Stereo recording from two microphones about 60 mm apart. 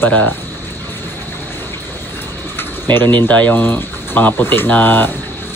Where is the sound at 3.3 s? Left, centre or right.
Left.